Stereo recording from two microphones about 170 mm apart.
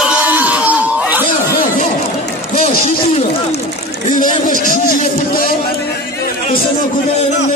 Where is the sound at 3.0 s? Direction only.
35° left (ahead or behind).